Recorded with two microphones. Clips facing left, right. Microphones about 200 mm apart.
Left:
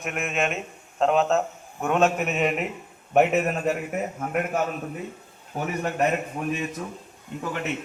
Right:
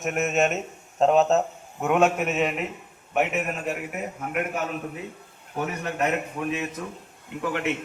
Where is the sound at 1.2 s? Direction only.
20° right (ahead or behind).